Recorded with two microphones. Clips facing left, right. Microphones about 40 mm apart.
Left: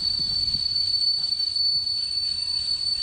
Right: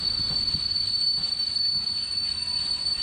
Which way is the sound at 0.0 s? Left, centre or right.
Right.